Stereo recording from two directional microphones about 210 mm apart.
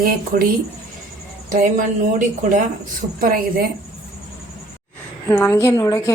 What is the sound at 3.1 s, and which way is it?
Speech, 40° right (ahead or behind).